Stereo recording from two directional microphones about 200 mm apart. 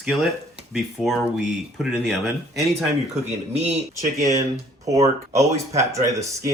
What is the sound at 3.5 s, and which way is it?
Speech, 30° right (ahead or behind).